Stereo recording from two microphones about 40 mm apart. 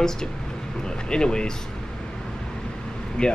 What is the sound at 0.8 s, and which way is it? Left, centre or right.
Speech, centre.